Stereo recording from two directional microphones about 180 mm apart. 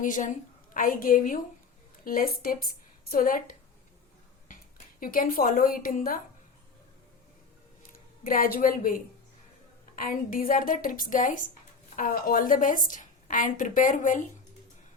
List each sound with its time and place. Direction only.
0.0 s a woman's voice: 45° left (ahead or behind)
4.9 s a woman's voice: 50° left (ahead or behind)
8.2 s a woman's voice: 55° left (ahead or behind)